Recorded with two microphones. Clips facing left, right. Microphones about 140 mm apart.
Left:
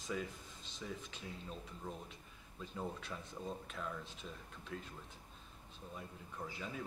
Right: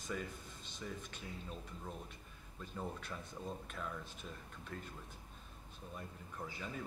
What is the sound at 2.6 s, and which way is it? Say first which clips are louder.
Speech: left 1 dB; centre (ahead or behind).